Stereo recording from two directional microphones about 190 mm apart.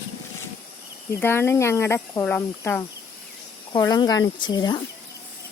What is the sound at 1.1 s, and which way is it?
Speech, 10° left (ahead or behind).